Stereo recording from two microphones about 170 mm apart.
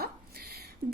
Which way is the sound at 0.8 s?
55° right (ahead or behind).